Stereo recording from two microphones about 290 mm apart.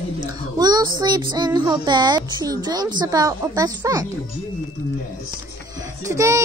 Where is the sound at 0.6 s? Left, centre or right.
Centre.